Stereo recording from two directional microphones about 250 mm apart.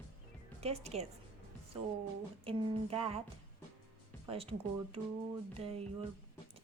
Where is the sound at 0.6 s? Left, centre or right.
Right.